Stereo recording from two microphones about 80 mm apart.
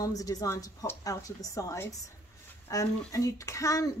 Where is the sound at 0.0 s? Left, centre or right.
Left.